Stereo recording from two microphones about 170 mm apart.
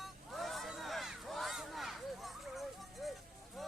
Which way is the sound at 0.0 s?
Centre (ahead or behind).